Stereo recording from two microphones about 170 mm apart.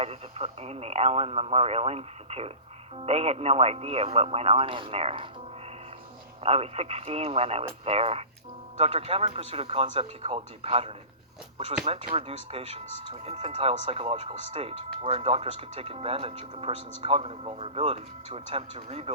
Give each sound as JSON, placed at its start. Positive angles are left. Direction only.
{"t": 0.0, "sound": "speech", "side_deg": -35}
{"t": 6.4, "sound": "speech", "side_deg": -35}